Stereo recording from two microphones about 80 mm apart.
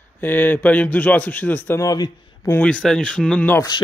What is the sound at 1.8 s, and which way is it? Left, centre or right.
Speech, left.